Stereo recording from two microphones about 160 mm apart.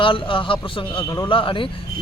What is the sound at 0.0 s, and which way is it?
Speech, 30° left (ahead or behind).